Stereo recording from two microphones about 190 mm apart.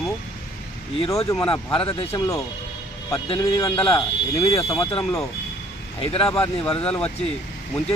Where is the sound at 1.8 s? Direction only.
30° left (ahead or behind).